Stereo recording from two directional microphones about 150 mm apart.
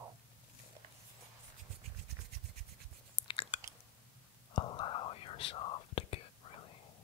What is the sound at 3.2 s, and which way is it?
Chewing, 35° left (ahead or behind).